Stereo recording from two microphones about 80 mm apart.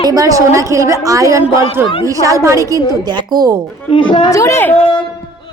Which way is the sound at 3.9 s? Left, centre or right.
Left.